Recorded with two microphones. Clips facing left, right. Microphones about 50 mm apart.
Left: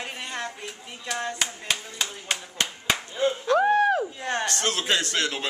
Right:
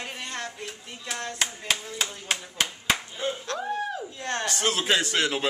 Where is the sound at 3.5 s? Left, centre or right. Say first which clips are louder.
Left 10 dB; left.